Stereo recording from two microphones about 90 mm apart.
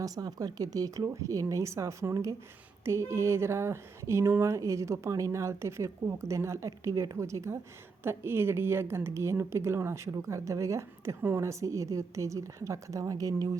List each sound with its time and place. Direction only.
0.0 s speech: 45° right (ahead or behind)